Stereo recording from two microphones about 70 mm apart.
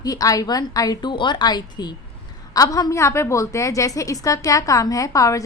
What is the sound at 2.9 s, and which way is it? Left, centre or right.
A woman's voice, left.